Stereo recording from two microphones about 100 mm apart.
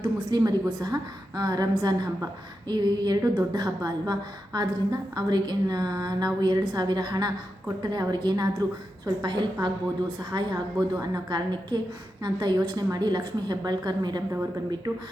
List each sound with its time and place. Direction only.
0.0 s a woman's voice: 45° right (ahead or behind)